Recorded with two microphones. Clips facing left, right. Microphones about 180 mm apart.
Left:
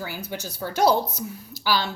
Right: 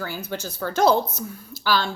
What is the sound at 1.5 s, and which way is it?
Speech, 50° right (ahead or behind).